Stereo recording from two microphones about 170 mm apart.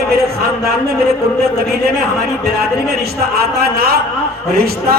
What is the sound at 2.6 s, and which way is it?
A man's voice, 65° right (ahead or behind).